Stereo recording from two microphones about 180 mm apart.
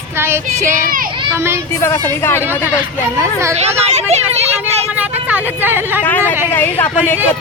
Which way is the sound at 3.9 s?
35° right (ahead or behind).